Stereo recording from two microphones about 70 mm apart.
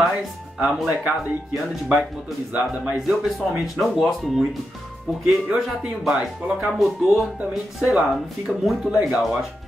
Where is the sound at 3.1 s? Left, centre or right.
Centre.